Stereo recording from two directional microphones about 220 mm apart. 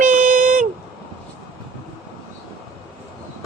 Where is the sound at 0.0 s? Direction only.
35° right (ahead or behind).